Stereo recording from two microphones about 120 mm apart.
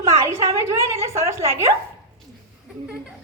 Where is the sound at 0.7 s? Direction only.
25° right (ahead or behind).